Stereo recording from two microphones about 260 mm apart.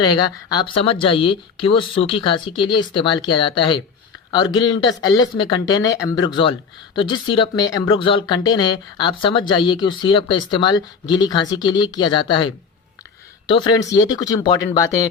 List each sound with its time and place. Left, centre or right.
0.0 s speech: centre